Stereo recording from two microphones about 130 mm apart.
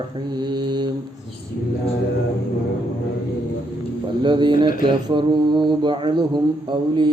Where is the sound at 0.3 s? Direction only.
30° right (ahead or behind).